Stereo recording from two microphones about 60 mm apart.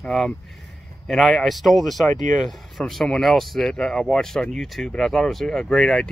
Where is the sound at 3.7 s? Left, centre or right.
Centre.